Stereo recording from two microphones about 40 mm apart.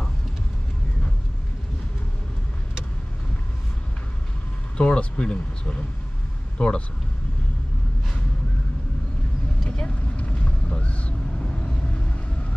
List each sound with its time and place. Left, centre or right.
4.7 s speech: left
9.7 s vehicle: left